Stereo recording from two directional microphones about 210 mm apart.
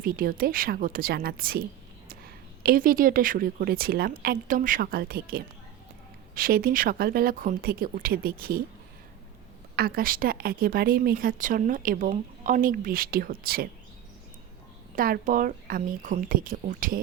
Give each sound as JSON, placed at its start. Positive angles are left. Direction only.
{"t": 0.0, "sound": "a woman's voice", "side_deg": -45}
{"t": 9.7, "sound": "a woman's voice", "side_deg": -45}
{"t": 14.9, "sound": "speech", "side_deg": -40}